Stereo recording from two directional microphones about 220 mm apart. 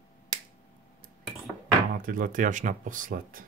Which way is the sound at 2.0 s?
40° right (ahead or behind).